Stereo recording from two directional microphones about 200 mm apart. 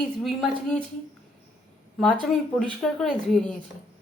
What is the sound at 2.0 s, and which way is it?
A woman's voice, centre (ahead or behind).